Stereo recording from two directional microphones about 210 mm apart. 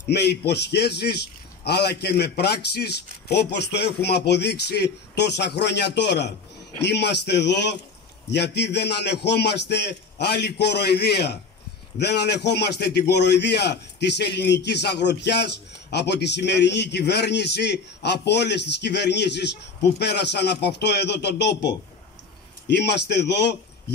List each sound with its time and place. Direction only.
0.0 s a man's voice: 50° left (ahead or behind)